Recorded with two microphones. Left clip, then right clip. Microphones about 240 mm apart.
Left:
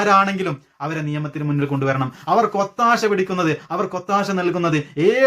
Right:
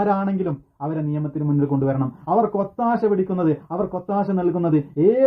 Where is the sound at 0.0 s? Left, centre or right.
Left.